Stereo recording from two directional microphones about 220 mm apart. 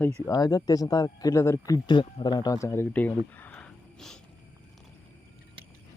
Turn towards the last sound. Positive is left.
turn(degrees=5)  # may be behind; listen again after turning